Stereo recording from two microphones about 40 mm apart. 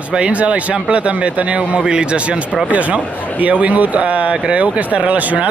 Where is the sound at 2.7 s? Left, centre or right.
Right.